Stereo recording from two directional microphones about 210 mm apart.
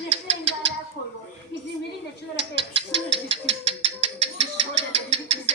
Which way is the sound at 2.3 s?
25° right (ahead or behind).